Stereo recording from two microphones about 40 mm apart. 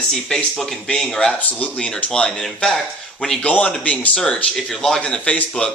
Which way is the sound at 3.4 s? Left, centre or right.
Left.